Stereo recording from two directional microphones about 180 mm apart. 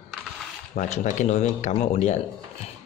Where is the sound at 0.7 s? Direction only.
45° left (ahead or behind).